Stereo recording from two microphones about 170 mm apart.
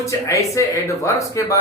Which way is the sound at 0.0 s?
20° left (ahead or behind).